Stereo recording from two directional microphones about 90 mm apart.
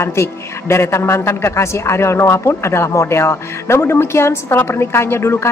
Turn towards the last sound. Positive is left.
turn(degrees=30)  # may be behind; listen again after turning